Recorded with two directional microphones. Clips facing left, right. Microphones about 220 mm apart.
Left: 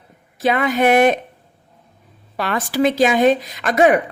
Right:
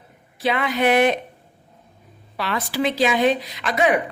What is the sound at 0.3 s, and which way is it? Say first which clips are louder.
Speech: left 4 dB; 45° left (ahead or behind).